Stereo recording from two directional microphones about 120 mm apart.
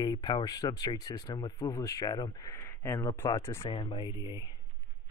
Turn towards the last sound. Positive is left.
turn(degrees=35)  # may be behind; listen again after turning